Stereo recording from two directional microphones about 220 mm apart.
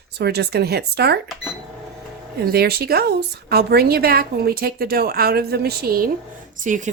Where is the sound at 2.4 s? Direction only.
45° right (ahead or behind).